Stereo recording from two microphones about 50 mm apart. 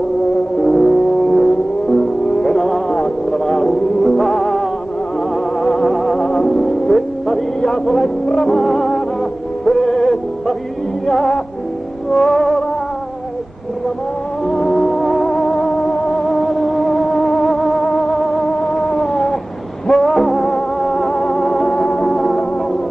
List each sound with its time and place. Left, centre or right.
0.6 s vehicle: centre
5.3 s music: centre
14.4 s music: centre